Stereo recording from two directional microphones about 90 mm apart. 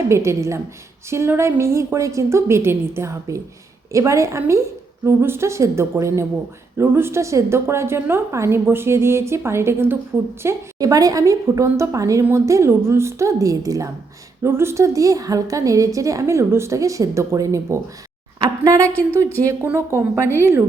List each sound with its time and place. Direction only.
0.1 s a woman's voice: 35° right (ahead or behind)
10.8 s a woman's voice: 40° right (ahead or behind)
19.6 s a woman's voice: 25° right (ahead or behind)